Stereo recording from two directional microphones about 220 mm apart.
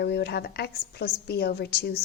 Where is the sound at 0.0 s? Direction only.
50° left (ahead or behind).